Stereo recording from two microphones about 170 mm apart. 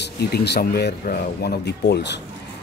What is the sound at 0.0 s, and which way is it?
Speech, 75° left (ahead or behind).